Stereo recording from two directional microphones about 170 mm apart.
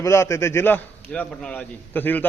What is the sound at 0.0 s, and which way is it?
A man's voice, 15° left (ahead or behind).